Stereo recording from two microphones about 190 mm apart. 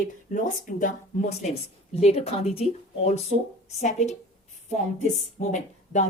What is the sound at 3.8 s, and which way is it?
Speech, 35° left (ahead or behind).